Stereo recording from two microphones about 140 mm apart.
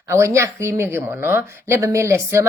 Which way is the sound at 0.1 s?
20° right (ahead or behind).